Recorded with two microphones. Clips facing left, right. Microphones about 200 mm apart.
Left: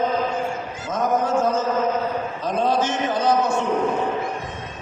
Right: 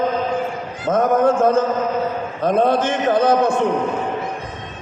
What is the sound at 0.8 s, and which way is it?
A man's voice, 55° right (ahead or behind).